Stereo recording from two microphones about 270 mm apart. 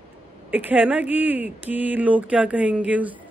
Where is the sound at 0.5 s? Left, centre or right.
Centre.